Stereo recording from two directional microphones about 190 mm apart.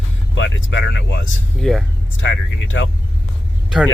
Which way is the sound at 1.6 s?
5° left (ahead or behind).